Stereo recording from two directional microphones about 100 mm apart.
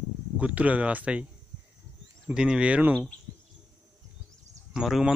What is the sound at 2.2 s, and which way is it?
Speech, 5° right (ahead or behind).